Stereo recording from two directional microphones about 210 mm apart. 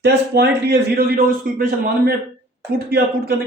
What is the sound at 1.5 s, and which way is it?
Speech, 40° right (ahead or behind).